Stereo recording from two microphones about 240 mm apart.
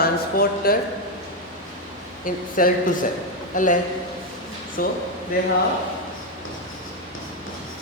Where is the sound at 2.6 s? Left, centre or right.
Left.